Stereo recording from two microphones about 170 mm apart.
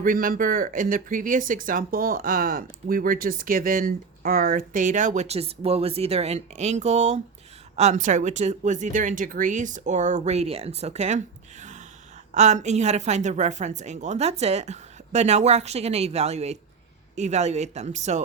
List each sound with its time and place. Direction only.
0.0 s speech: 50° right (ahead or behind)
11.6 s gasp: 45° right (ahead or behind)
12.3 s speech: 45° right (ahead or behind)